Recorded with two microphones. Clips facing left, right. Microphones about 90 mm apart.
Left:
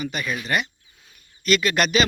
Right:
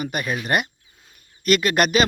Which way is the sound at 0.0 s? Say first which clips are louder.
Right 2 dB; 45° right (ahead or behind).